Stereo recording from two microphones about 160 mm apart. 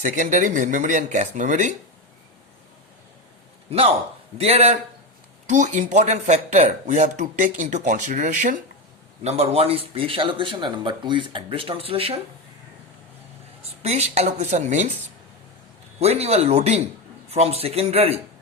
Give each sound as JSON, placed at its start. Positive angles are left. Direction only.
{"t": 0.0, "sound": "speech", "side_deg": -50}
{"t": 4.4, "sound": "speech", "side_deg": -40}
{"t": 9.2, "sound": "speech", "side_deg": -40}
{"t": 13.8, "sound": "speech", "side_deg": -45}
{"t": 16.0, "sound": "a man's voice", "side_deg": -40}